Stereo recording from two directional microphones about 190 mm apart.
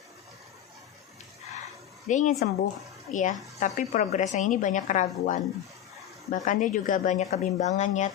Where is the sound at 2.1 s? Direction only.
40° left (ahead or behind).